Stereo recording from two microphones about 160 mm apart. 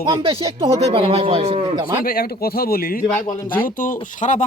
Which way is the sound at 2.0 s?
70° left (ahead or behind).